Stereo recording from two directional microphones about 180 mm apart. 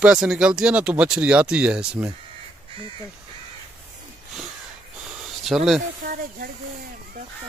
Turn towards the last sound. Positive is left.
turn(degrees=-50)  # may be behind; listen again after turning